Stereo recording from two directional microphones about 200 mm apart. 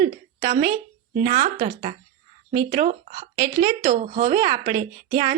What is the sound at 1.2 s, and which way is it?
Speech, 50° right (ahead or behind).